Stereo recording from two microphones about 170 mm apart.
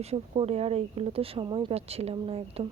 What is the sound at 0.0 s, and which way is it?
Speech, 35° right (ahead or behind).